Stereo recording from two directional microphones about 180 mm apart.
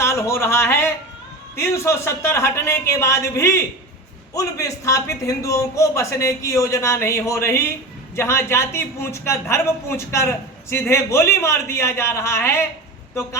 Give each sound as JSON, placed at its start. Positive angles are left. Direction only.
{"t": 0.0, "sound": "a man's voice", "side_deg": 15}